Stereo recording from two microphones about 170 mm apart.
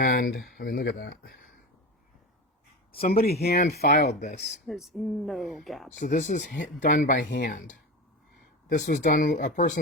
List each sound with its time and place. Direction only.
0.0 s speech: 60° left (ahead or behind)
2.9 s speech: 60° left (ahead or behind)
4.1 s speech: 45° left (ahead or behind)
4.4 s speech: centre (ahead or behind)
6.0 s speech: 45° left (ahead or behind)